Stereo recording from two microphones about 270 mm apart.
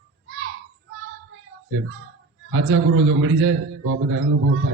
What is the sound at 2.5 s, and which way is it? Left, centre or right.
A man's voice, right.